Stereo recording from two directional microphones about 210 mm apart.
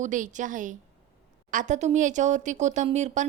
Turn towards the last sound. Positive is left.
turn(degrees=-35)  # may be behind; listen again after turning